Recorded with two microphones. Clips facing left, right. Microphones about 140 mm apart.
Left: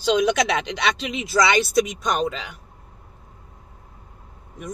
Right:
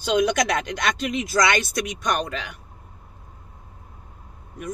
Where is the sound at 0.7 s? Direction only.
50° right (ahead or behind).